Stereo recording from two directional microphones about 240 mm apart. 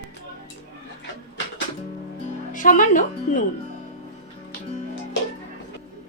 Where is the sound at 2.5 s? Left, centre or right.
Left.